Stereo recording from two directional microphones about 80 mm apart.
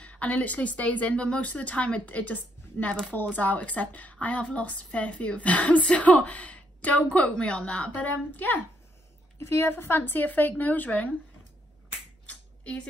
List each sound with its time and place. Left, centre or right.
0.0 s a woman's voice: centre
9.4 s speech: left; by 11.1 s centre
12.3 s a sound: centre